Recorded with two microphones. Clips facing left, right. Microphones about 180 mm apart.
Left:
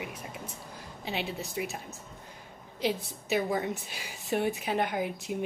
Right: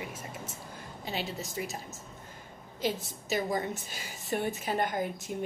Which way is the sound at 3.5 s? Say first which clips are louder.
Left 1 dB; centre (ahead or behind).